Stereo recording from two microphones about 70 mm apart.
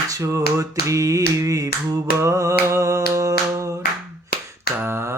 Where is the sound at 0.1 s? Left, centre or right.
Right.